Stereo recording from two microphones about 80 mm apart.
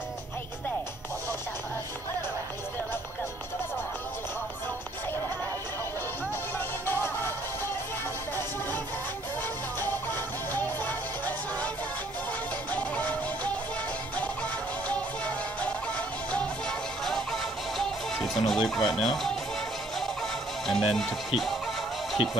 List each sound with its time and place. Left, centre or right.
6.9 s music: left
10.5 s music: left
12.7 s music: centre
14.9 s music: centre